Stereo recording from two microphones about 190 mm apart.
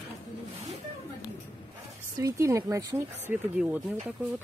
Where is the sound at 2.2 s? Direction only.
15° right (ahead or behind).